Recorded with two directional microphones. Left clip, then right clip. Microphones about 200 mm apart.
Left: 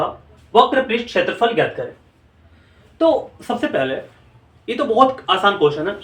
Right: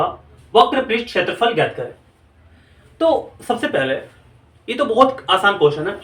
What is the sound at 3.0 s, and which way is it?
Speech, centre (ahead or behind).